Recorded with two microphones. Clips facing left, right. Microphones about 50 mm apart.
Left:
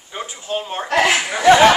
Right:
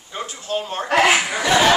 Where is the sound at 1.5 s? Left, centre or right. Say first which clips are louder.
Left 6 dB; left.